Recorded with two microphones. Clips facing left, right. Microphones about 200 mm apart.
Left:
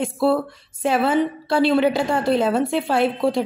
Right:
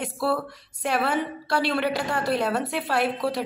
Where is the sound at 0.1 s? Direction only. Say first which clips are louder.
Left 7 dB; 25° left (ahead or behind).